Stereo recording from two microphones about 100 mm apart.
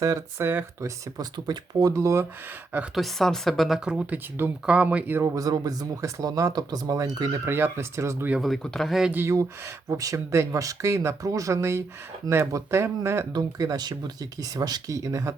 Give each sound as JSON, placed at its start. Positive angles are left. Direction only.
{"t": 0.0, "sound": "speech", "side_deg": -35}
{"t": 2.9, "sound": "speech", "side_deg": 0}
{"t": 5.2, "sound": "speech", "side_deg": -35}
{"t": 7.4, "sound": "speech", "side_deg": -25}
{"t": 8.4, "sound": "speech", "side_deg": 0}
{"t": 9.1, "sound": "speech", "side_deg": -30}
{"t": 13.3, "sound": "speech", "side_deg": -40}